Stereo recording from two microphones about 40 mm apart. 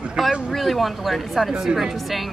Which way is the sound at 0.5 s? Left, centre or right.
Centre.